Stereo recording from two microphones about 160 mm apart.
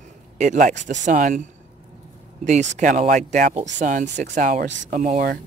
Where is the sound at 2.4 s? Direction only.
50° right (ahead or behind).